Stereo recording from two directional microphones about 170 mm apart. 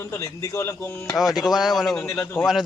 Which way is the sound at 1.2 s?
Centre (ahead or behind).